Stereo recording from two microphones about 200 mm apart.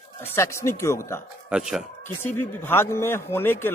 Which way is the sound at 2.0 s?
10° left (ahead or behind).